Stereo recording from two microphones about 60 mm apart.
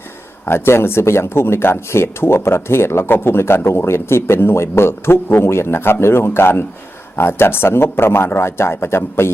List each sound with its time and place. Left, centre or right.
0.4 s speech: left